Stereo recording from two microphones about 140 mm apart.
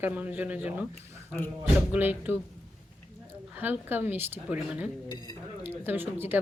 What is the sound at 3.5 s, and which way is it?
A woman's voice, 15° right (ahead or behind).